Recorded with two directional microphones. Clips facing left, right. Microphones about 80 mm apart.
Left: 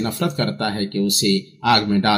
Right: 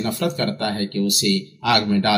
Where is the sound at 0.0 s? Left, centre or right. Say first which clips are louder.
Even; left.